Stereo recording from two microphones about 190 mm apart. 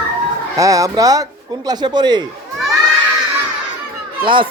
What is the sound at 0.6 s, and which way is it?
A man's voice, 15° right (ahead or behind).